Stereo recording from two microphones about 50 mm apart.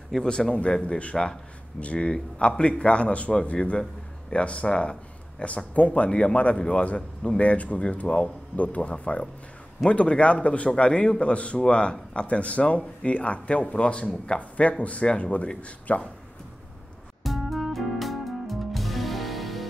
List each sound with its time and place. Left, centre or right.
0.2 s a man's voice: centre
1.1 s a man's voice: centre
1.8 s a man's voice: left
2.1 s a man's voice: centre
17.2 s music: centre